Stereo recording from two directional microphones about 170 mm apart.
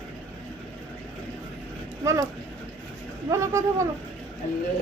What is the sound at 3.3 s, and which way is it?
Speech, 15° right (ahead or behind).